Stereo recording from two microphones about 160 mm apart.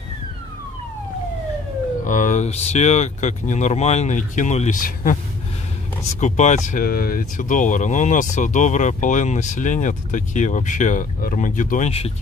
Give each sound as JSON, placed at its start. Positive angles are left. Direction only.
{"t": 2.0, "sound": "speech", "side_deg": 55}
{"t": 6.1, "sound": "speech", "side_deg": 45}